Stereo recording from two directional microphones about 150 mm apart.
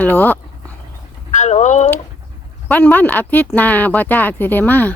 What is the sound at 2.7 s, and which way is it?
Speech, 10° left (ahead or behind).